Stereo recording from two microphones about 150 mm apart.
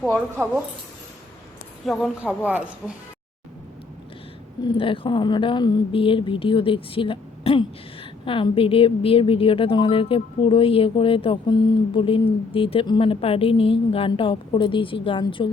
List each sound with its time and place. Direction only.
0.1 s speech: 10° right (ahead or behind)
1.8 s a woman's voice: centre (ahead or behind)
2.2 s speech: 10° right (ahead or behind)
4.6 s a woman's voice: 35° left (ahead or behind)